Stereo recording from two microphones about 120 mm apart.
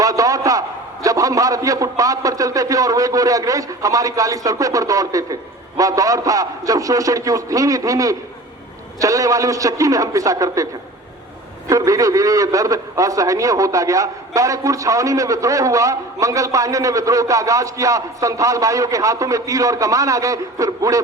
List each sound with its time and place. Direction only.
0.0 s a sound: 30° right (ahead or behind)
1.0 s a man's voice: 30° right (ahead or behind)
11.7 s a man's voice: 30° right (ahead or behind)